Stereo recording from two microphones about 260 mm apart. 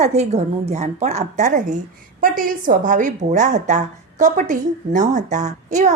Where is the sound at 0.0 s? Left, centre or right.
Right.